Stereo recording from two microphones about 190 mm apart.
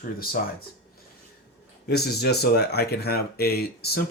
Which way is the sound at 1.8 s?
60° left (ahead or behind).